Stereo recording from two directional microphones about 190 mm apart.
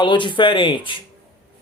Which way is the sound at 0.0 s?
25° left (ahead or behind).